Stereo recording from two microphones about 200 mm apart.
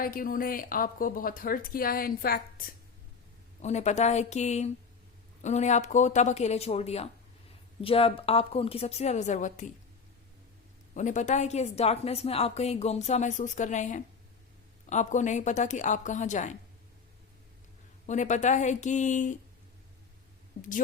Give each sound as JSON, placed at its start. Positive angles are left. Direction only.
{"t": 0.0, "sound": "a woman's voice", "side_deg": 45}
{"t": 3.6, "sound": "a woman's voice", "side_deg": 35}
{"t": 10.9, "sound": "a woman's voice", "side_deg": 40}
{"t": 18.0, "sound": "a woman's voice", "side_deg": 35}
{"t": 20.6, "sound": "a woman's voice", "side_deg": 40}